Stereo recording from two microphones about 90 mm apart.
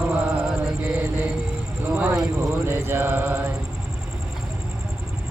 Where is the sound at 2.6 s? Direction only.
25° right (ahead or behind).